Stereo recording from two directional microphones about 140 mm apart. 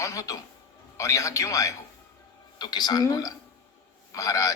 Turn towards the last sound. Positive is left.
turn(degrees=25)  # may be behind; listen again after turning